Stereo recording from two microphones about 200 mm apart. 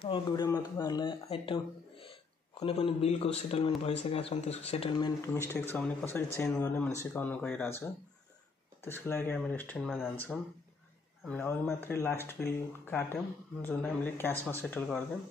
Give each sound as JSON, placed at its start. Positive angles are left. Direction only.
{"t": 0.0, "sound": "speech", "side_deg": 20}
{"t": 5.3, "sound": "speech", "side_deg": 10}
{"t": 11.2, "sound": "speech", "side_deg": 10}